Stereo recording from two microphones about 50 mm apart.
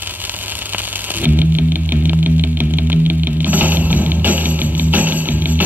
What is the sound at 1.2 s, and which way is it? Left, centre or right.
Music, right.